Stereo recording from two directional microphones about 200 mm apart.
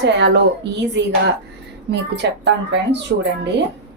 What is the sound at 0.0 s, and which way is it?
Speech, 60° right (ahead or behind).